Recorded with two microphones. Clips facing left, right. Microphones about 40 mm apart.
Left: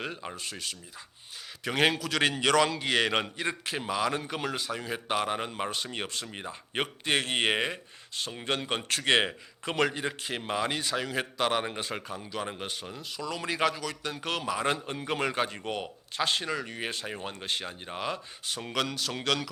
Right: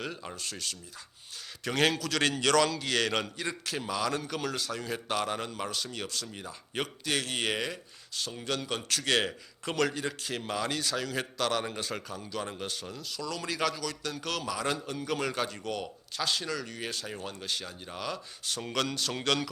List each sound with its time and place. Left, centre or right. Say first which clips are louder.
0.0 s a man's voice: left 1 dB; left
18.4 s speech: even; centre